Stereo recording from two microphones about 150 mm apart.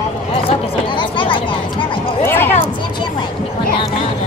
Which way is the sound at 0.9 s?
30° left (ahead or behind).